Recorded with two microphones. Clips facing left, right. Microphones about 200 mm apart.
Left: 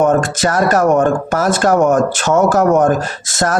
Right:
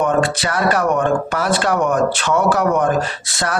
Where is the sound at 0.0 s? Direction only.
45° left (ahead or behind).